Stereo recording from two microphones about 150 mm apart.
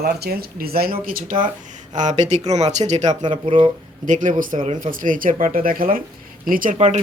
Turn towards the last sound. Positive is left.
turn(degrees=-55)  # may be behind; listen again after turning